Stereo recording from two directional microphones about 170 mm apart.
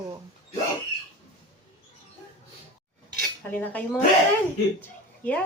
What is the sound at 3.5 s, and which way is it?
Speech, 10° left (ahead or behind).